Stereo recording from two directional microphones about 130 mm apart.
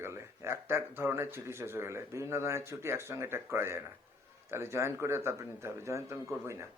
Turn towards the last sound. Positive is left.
turn(degrees=-20)  # may be behind; listen again after turning